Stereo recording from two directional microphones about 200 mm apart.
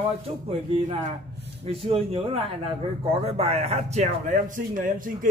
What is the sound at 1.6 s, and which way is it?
A man's voice, 30° right (ahead or behind).